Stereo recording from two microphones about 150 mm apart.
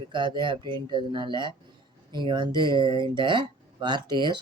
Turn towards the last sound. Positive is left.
turn(degrees=-30)  # may be behind; listen again after turning